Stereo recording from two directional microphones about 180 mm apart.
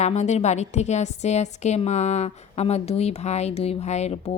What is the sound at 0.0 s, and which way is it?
A woman's voice, 40° left (ahead or behind).